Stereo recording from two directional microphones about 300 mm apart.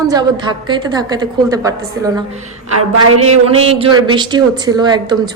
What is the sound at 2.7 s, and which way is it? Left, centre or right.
Speech, right.